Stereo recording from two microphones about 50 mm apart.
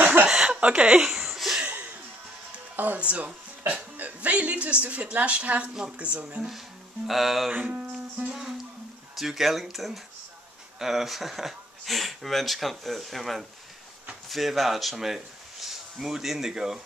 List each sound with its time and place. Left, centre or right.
0.0 s a sound: right
0.3 s a sound: centre
1.0 s laughter: centre
1.6 s music: right
2.7 s speech: right
3.0 s a woman's voice: right
7.1 s speech: centre
7.5 s speech: right
8.3 s music: centre
9.1 s speech: centre